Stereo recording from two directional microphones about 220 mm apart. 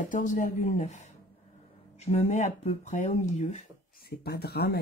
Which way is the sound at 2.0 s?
30° left (ahead or behind).